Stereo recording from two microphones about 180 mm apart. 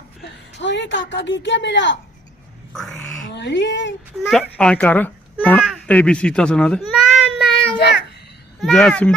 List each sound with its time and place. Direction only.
0.5 s speech: 80° left
2.7 s a child's voice: centre (ahead or behind)
3.3 s speech: 75° left (ahead or behind)
4.3 s a child's voice: 5° left (ahead or behind)
5.7 s a sound: 5° left (ahead or behind)
8.6 s a child's voice: 5° left (ahead or behind)